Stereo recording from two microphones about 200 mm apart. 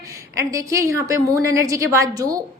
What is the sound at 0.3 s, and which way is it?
A woman's voice, 15° right (ahead or behind).